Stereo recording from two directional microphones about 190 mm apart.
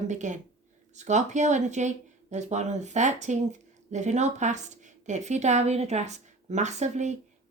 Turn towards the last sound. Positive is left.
turn(degrees=-40)  # may be behind; listen again after turning